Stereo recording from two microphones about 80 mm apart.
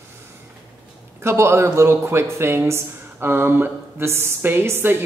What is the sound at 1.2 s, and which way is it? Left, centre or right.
Speech, right.